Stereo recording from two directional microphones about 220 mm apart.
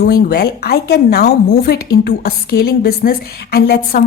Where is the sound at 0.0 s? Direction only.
45° left (ahead or behind).